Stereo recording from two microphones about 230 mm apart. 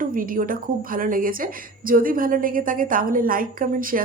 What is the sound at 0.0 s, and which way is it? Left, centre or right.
A woman's voice, right.